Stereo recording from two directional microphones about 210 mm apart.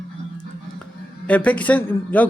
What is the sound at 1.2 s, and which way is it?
Speech, 5° left (ahead or behind).